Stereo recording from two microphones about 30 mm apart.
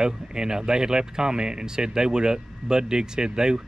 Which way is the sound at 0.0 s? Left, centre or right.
Right.